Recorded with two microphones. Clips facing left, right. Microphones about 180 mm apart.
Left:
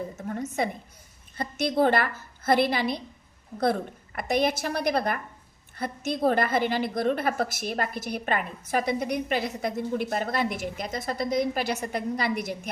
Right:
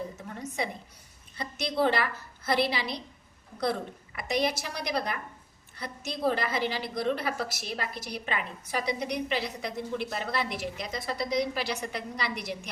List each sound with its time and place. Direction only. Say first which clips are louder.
0.2 s a woman's voice: left 6 dB; 50° left (ahead or behind)